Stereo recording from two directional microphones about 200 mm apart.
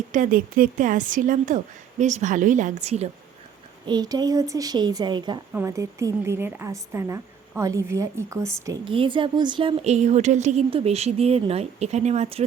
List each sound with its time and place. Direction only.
0.1 s a woman's voice: 40° right (ahead or behind)
3.8 s a woman's voice: 20° right (ahead or behind)